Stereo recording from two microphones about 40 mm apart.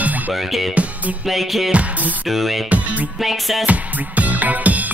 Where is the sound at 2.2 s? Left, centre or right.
Centre.